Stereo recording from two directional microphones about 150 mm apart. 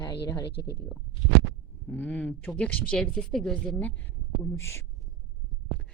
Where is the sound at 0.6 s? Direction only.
90° left.